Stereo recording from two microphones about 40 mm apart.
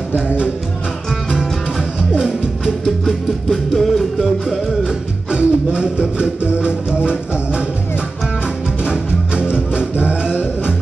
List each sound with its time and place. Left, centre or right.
2.1 s music: centre
3.1 s music: centre
4.2 s music: centre
5.3 s music: right
8.8 s music: right